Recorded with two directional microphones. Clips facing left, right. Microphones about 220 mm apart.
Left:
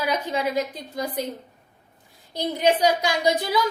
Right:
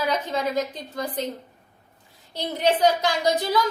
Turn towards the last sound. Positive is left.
turn(degrees=10)  # may be behind; listen again after turning